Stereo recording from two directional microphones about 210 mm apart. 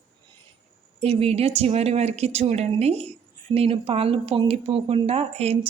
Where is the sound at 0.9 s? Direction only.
30° right (ahead or behind).